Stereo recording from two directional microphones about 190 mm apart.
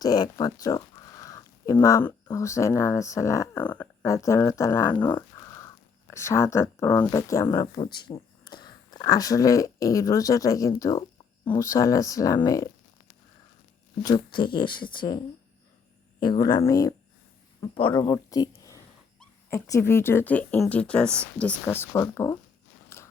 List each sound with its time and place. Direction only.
0.0 s speech: 20° left (ahead or behind)
7.8 s speech: 25° left (ahead or behind)
14.0 s speech: 20° left (ahead or behind)
16.2 s speech: 20° left (ahead or behind)
22.9 s biting: 15° left (ahead or behind)